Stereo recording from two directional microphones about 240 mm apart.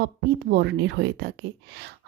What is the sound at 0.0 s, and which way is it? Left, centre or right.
A woman's voice, right.